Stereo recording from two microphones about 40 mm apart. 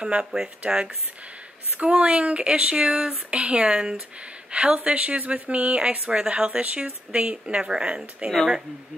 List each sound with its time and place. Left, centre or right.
0.0 s speech: right
1.8 s speech: right